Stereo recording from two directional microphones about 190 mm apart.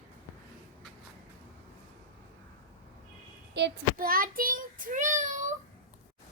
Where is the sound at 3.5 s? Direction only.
55° right (ahead or behind); by 5.5 s 40° right (ahead or behind).